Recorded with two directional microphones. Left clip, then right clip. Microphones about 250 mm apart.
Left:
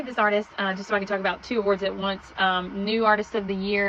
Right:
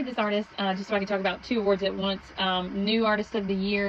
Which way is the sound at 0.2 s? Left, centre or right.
Left.